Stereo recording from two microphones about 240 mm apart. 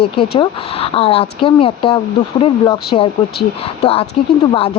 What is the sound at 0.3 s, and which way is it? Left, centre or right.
Speech, left.